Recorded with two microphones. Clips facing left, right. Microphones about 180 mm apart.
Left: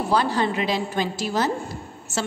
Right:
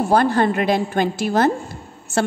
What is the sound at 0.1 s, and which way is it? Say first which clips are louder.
A woman's voice: right 5 dB; 55° right (ahead or behind).